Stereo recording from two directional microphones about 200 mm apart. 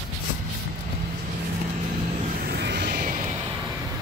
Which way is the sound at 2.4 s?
55° right (ahead or behind).